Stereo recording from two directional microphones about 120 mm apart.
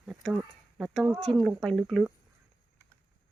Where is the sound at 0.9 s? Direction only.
Centre (ahead or behind).